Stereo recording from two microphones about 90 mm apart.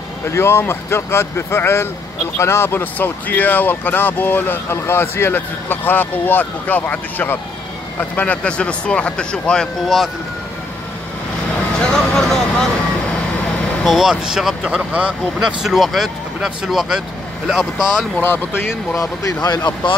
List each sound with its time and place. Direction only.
0.3 s speech: 25° left (ahead or behind); by 10.0 s 5° left (ahead or behind)
11.9 s vehicle: 5° left (ahead or behind)
13.8 s speech: 5° right (ahead or behind)
18.2 s speech: 25° left (ahead or behind)
18.9 s speech: 45° left (ahead or behind)